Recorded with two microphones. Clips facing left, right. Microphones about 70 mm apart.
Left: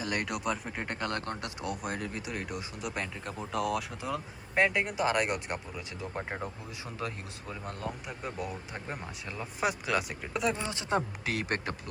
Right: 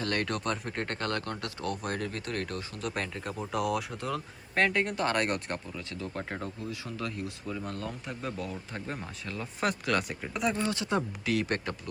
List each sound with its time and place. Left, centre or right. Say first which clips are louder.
0.0 s speech: right 2 dB; centre
1.1 s speech: right 1 dB; left
1.7 s speech: right 1 dB; centre; by 7.9 s left
8.0 s speech: right 1 dB; centre
10.7 s speech: right 1 dB; left